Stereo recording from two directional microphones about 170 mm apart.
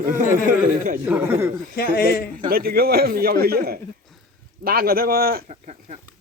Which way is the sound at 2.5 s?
60° right (ahead or behind).